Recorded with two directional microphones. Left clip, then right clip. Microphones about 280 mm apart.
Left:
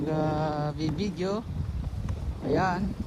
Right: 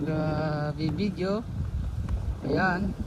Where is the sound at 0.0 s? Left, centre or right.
Centre.